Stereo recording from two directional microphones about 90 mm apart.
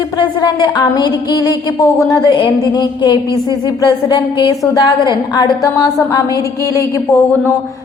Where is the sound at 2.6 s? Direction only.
55° left (ahead or behind).